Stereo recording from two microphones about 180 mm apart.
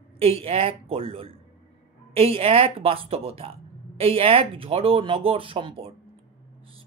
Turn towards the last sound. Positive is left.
turn(degrees=-30)  # may be behind; listen again after turning